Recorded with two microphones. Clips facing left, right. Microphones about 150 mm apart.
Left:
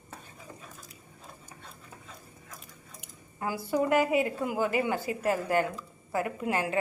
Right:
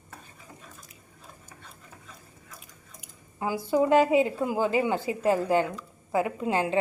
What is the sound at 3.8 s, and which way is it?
A woman's voice, 25° right (ahead or behind).